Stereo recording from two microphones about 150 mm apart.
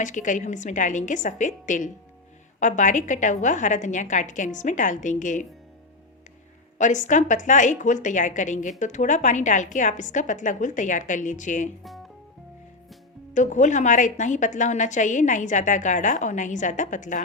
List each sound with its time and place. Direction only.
0.0 s a woman's voice: 55° left (ahead or behind)
6.7 s a woman's voice: 55° left (ahead or behind)
13.3 s a woman's voice: 55° left (ahead or behind)